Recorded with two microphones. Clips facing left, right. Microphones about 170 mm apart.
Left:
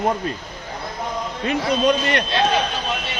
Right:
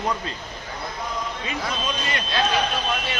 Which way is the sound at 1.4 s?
65° left (ahead or behind).